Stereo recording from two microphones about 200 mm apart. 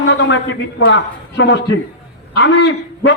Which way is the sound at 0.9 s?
60° left (ahead or behind).